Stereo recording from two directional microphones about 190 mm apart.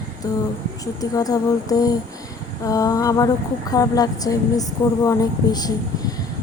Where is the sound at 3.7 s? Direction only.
20° left (ahead or behind).